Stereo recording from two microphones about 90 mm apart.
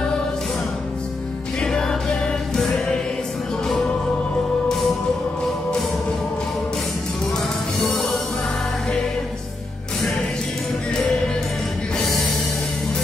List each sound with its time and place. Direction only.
1.6 s music: 5° left (ahead or behind)
2.5 s choir: 5° left (ahead or behind)
4.6 s music: centre (ahead or behind)